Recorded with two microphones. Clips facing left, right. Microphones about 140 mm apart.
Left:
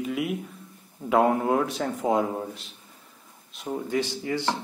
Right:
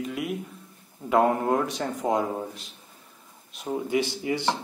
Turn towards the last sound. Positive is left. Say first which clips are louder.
# right 1 dB
turn(degrees=-15)  # may be behind; listen again after turning